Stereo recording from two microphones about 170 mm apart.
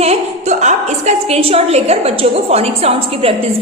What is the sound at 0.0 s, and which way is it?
A woman's voice, 40° right (ahead or behind).